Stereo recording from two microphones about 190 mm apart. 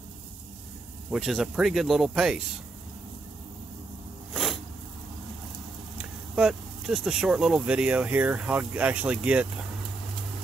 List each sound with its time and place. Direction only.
1.1 s speech: centre (ahead or behind)
4.3 s a sound: centre (ahead or behind)
6.3 s speech: 5° right (ahead or behind)